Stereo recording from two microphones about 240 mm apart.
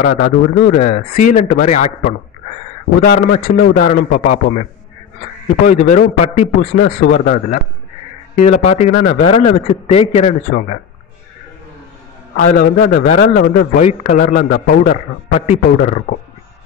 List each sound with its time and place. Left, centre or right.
0.0 s a man's voice: left
5.7 s a man's voice: left
8.4 s a man's voice: left
12.5 s a man's voice: left